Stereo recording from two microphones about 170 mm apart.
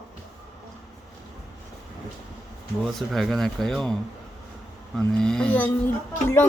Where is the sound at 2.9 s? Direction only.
Centre (ahead or behind).